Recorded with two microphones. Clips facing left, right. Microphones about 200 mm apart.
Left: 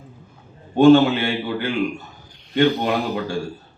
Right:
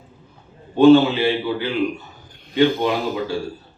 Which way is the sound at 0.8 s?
50° left (ahead or behind).